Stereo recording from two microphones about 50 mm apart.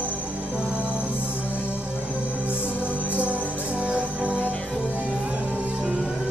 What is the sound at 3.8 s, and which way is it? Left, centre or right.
Music, right.